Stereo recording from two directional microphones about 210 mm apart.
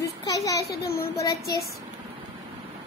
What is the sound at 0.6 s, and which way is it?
Speech, 45° left (ahead or behind).